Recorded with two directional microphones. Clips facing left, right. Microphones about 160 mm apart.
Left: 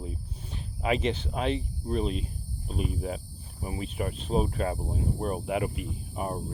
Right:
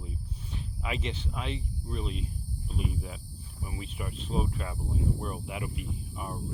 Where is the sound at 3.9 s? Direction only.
60° left (ahead or behind).